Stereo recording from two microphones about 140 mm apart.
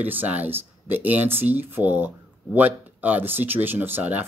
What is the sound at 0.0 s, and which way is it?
Speech, 10° right (ahead or behind).